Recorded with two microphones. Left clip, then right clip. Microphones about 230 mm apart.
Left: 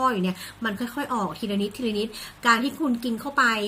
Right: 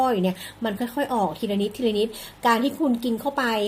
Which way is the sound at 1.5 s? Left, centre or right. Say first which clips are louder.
Right 3 dB; centre.